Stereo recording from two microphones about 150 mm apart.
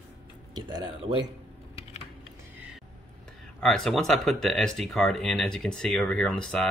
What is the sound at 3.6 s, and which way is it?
Speech, 5° left (ahead or behind).